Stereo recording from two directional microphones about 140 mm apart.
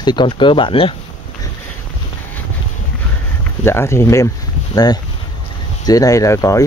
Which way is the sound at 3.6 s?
20° left (ahead or behind).